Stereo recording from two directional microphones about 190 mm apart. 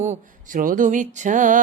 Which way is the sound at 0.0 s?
40° right (ahead or behind).